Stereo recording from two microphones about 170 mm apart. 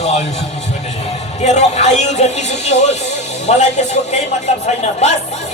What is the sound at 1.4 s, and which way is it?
Speech, 40° left (ahead or behind).